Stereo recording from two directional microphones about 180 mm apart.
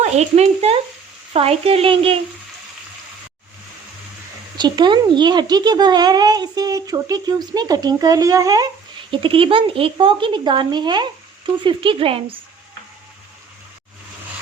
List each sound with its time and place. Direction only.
0.0 s a woman's voice: 35° right (ahead or behind)
4.5 s a child's voice: 25° right (ahead or behind)